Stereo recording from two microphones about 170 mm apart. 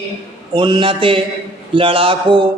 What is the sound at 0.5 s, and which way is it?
A man's voice, 30° right (ahead or behind).